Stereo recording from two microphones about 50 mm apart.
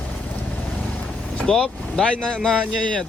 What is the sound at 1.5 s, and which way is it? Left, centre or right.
Speech, centre.